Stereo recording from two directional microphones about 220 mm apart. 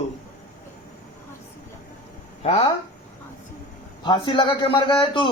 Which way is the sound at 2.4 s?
25° left (ahead or behind).